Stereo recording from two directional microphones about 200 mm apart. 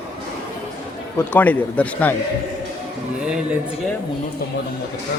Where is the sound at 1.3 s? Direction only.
10° left (ahead or behind).